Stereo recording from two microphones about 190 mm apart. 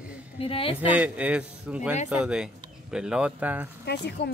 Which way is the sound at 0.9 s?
5° right (ahead or behind).